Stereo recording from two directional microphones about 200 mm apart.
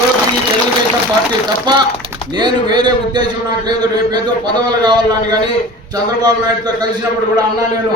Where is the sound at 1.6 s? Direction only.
20° right (ahead or behind).